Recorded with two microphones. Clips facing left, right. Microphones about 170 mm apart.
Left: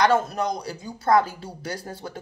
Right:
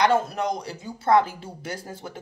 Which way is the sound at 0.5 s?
25° right (ahead or behind).